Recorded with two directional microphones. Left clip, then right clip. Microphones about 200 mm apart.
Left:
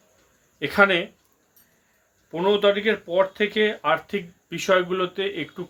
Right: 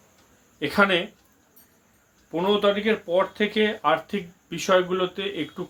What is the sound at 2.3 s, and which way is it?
Speech, 20° left (ahead or behind).